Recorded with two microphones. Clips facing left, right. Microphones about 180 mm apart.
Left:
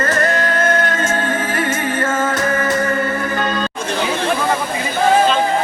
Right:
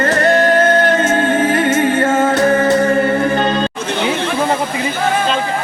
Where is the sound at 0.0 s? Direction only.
30° right (ahead or behind).